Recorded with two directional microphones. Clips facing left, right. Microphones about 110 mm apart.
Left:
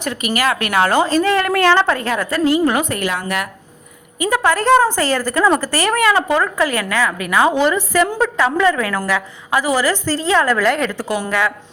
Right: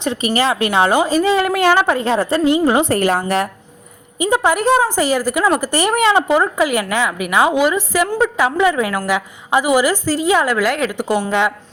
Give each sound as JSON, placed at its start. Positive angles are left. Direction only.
{"t": 0.0, "sound": "speech", "side_deg": -25}
{"t": 2.0, "sound": "a woman's voice", "side_deg": -25}
{"t": 4.2, "sound": "speech", "side_deg": -20}
{"t": 11.3, "sound": "a woman's voice", "side_deg": -20}